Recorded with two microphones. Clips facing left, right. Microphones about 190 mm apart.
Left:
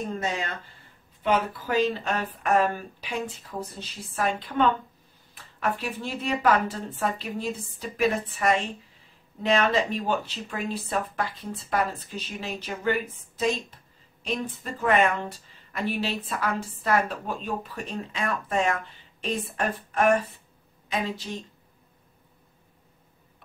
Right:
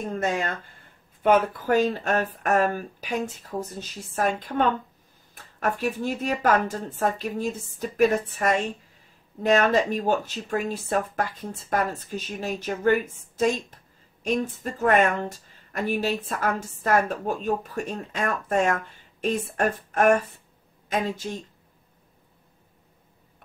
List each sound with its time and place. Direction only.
0.2 s speech: 50° right (ahead or behind)